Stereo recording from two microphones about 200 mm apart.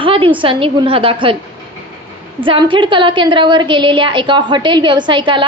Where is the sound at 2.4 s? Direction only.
25° right (ahead or behind).